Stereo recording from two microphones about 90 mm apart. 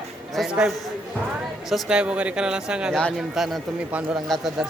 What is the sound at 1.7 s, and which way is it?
Speech, 10° right (ahead or behind).